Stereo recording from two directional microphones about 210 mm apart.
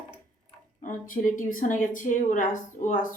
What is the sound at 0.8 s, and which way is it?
Speech, 40° left (ahead or behind).